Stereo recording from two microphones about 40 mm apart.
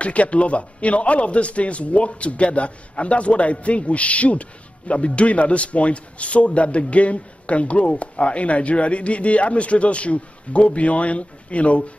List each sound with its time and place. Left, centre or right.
0.0 s speech: left